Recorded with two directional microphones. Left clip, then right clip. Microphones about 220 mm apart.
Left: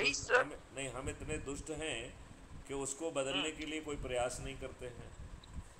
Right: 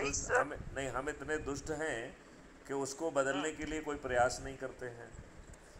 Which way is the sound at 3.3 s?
10° left (ahead or behind).